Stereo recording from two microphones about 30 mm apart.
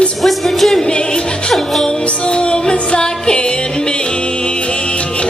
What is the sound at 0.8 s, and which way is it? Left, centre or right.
Music, left.